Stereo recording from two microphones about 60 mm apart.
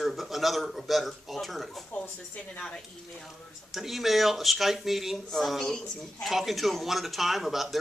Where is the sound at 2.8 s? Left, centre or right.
Centre.